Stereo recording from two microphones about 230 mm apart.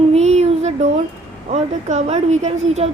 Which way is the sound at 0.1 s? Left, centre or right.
Right.